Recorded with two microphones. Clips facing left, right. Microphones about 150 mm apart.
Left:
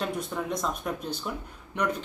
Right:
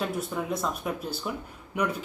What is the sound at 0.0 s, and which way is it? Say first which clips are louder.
A woman's voice: right 1 dB; 5° right (ahead or behind).